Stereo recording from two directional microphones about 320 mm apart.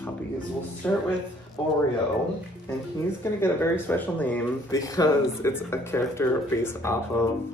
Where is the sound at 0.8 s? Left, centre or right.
Centre.